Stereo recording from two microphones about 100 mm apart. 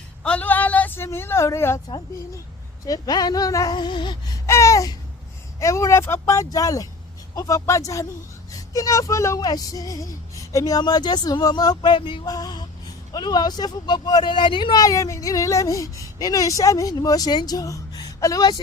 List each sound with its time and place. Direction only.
0.2 s a sound: 10° left (ahead or behind); by 1.8 s 30° left (ahead or behind)
2.8 s speech: 40° left (ahead or behind)
4.4 s babbling: 30° left (ahead or behind)
5.5 s speech: 30° left (ahead or behind); by 12.2 s 55° left (ahead or behind)
12.2 s a woman's voice: 40° left (ahead or behind)